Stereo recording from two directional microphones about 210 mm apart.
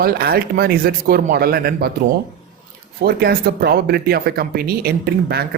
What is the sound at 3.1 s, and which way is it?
Speech, 50° right (ahead or behind).